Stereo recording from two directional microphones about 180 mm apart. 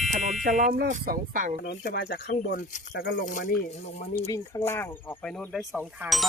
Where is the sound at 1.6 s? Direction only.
65° left (ahead or behind).